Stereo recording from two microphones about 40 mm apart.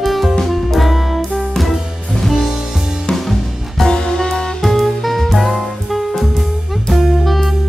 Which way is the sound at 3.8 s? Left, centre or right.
Centre.